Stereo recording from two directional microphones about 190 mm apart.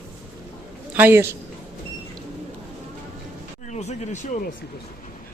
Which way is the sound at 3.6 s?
35° left (ahead or behind).